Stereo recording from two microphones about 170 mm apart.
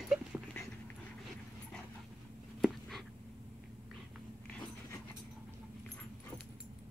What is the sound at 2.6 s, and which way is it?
Writing, centre (ahead or behind).